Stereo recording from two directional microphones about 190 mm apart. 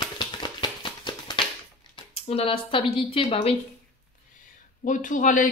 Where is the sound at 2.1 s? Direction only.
30° left (ahead or behind).